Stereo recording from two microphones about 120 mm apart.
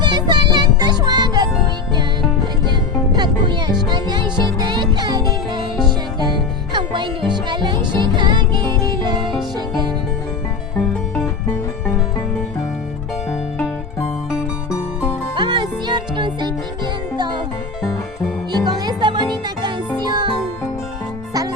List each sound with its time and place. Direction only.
0.0 s music: 40° right (ahead or behind)
3.2 s music: 40° right (ahead or behind)
6.7 s music: 40° right (ahead or behind)
15.4 s music: 40° right (ahead or behind)
18.5 s music: 35° right (ahead or behind)